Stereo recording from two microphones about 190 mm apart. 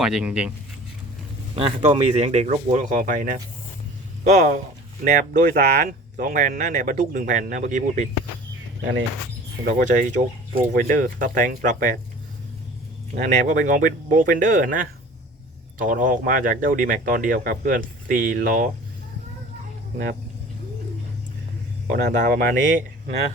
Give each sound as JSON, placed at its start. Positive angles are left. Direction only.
{"t": 0.0, "sound": "speech", "side_deg": -5}
{"t": 1.5, "sound": "speech", "side_deg": -30}
{"t": 8.8, "sound": "speech", "side_deg": -75}
{"t": 9.6, "sound": "speech", "side_deg": -45}
{"t": 13.1, "sound": "speech", "side_deg": -40}
{"t": 15.9, "sound": "speech", "side_deg": -45}
{"t": 21.8, "sound": "speech", "side_deg": -45}